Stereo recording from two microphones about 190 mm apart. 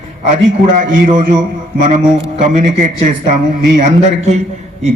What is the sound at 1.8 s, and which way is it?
A man's voice, 40° right (ahead or behind).